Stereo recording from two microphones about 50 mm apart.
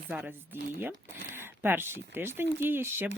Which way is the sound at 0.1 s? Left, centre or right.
Right.